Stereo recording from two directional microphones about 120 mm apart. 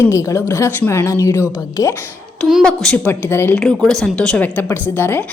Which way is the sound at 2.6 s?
5° left (ahead or behind).